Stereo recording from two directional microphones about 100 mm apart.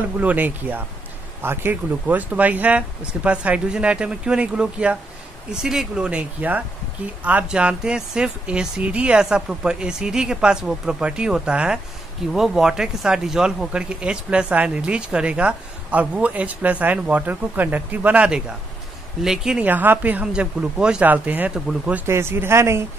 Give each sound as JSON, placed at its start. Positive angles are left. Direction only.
{"t": 0.2, "sound": "speech", "side_deg": -15}
{"t": 19.6, "sound": "speech", "side_deg": -20}
{"t": 22.0, "sound": "speech", "side_deg": -25}